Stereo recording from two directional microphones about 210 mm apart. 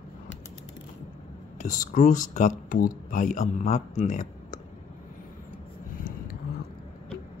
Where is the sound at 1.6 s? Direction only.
40° left (ahead or behind).